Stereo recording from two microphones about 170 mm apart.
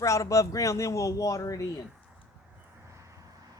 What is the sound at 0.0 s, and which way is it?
A man's voice, 20° left (ahead or behind).